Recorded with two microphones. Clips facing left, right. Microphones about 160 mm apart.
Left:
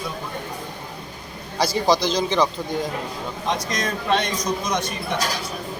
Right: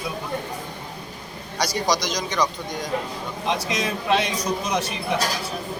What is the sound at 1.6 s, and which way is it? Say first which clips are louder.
Speech: left 4 dB; 25° left (ahead or behind).